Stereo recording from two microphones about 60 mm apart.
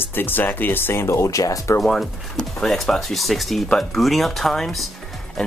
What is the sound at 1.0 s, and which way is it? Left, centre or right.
Speech, left.